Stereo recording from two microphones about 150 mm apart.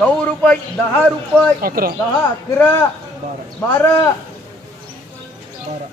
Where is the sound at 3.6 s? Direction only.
15° left (ahead or behind).